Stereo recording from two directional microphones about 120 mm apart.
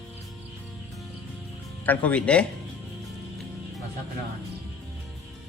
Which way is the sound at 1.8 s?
15° left (ahead or behind).